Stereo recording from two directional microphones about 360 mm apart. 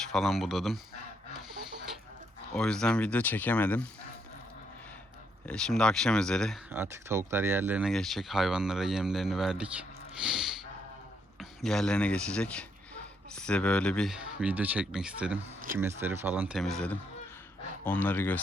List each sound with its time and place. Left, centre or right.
0.1 s speech: centre
2.5 s speech: centre
5.5 s speech: centre